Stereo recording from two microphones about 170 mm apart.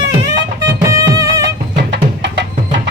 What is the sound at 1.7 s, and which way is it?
Music, 90° right.